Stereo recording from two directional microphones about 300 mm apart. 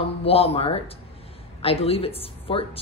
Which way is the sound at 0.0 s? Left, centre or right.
Centre.